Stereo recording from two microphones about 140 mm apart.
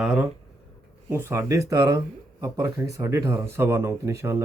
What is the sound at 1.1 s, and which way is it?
Speech, 20° right (ahead or behind).